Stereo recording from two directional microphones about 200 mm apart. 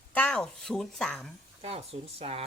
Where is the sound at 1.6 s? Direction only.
30° right (ahead or behind).